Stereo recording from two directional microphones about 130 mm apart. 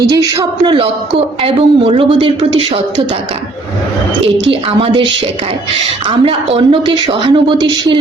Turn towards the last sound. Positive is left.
turn(degrees=-35)  # may be behind; listen again after turning